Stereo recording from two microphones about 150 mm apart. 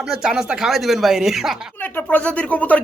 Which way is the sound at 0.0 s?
5° right (ahead or behind).